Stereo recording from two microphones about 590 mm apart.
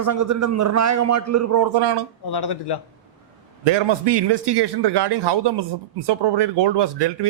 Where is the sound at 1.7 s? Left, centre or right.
Right.